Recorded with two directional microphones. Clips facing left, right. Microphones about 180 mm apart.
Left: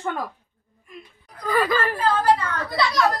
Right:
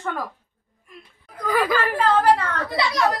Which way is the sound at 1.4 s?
10° right (ahead or behind).